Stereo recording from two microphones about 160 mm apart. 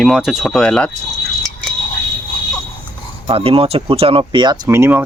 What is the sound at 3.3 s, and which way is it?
Speech, 35° right (ahead or behind).